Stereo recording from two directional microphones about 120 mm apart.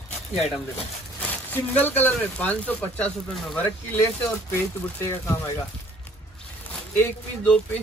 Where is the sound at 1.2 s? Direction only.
15° left (ahead or behind).